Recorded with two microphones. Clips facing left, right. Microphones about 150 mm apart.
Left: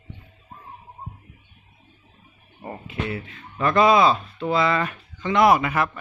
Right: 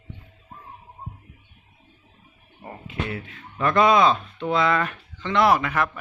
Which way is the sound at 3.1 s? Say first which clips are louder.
Left 1 dB; centre (ahead or behind).